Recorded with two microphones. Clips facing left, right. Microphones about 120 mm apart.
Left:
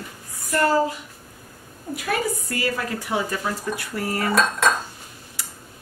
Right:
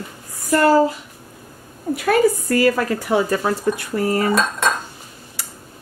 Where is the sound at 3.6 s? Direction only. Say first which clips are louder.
Right 7 dB; 30° right (ahead or behind).